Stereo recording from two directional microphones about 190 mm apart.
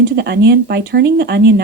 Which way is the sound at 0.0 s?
60° right (ahead or behind).